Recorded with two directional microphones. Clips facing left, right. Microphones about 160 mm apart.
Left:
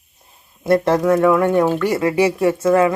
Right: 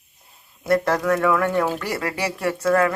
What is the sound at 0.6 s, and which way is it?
Speech, 25° left (ahead or behind).